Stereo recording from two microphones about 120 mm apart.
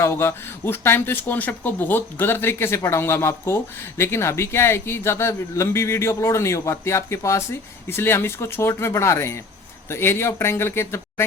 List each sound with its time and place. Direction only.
0.0 s speech: 20° left (ahead or behind)